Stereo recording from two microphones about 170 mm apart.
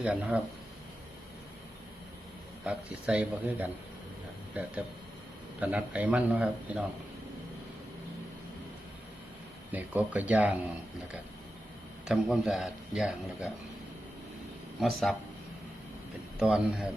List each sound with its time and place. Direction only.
0.0 s a man's voice: 5° right (ahead or behind)
2.6 s a man's voice: 5° right (ahead or behind)
5.5 s a man's voice: 10° right (ahead or behind)
9.7 s a man's voice: 10° right (ahead or behind)
12.0 s speech: centre (ahead or behind)
14.8 s speech: centre (ahead or behind)
16.4 s speech: 5° right (ahead or behind)